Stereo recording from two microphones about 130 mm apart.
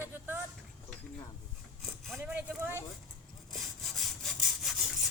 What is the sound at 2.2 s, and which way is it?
Speech, 10° right (ahead or behind).